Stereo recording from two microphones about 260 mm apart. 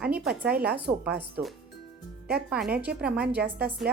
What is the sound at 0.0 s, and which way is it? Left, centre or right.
Speech, centre.